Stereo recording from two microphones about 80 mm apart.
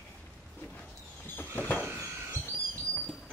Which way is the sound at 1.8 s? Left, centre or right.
Right.